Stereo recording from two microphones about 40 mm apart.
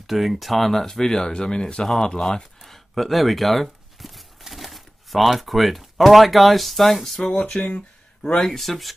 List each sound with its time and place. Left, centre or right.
0.0 s speech: centre; by 1.9 s left
2.6 s speech: centre
7.6 s speech: left
8.5 s speech: centre